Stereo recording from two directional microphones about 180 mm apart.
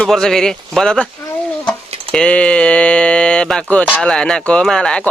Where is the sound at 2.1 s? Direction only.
5° left (ahead or behind).